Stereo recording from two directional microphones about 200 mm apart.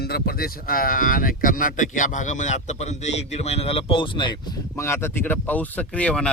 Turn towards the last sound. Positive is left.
turn(degrees=5)  # may be behind; listen again after turning